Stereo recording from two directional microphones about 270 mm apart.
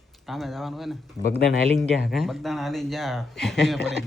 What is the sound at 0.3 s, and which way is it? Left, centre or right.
Speech, centre.